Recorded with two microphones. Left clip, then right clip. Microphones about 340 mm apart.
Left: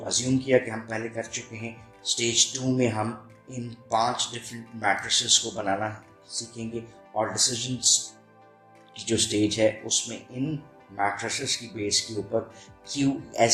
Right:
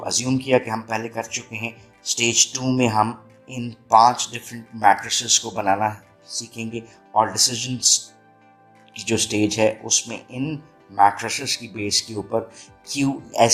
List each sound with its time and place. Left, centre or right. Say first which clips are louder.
0.0 s speech: right 4 dB; right